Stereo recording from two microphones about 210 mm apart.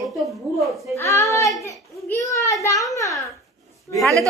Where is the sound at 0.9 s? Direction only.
15° left (ahead or behind).